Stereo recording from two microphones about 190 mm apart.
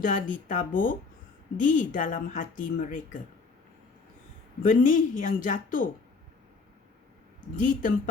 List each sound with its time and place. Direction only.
0.0 s a woman's voice: 45° left (ahead or behind)
4.6 s a woman's voice: 45° left (ahead or behind)
7.5 s a woman's voice: 45° left (ahead or behind)